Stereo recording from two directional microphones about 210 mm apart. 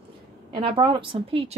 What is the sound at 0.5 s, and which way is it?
A woman's voice, 25° right (ahead or behind).